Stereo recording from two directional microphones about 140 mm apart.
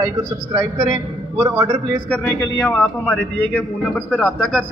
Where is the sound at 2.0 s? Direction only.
10° left (ahead or behind).